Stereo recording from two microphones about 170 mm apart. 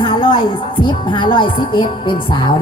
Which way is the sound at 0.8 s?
30° left (ahead or behind).